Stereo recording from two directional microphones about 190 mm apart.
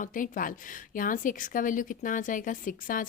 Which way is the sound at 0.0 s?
45° left (ahead or behind).